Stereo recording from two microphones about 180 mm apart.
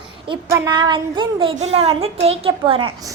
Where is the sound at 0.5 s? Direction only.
20° right (ahead or behind).